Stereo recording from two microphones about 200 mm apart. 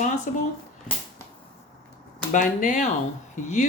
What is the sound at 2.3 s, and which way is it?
Speech, 40° left (ahead or behind).